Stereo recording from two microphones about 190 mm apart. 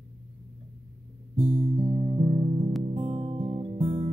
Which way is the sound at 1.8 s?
35° right (ahead or behind).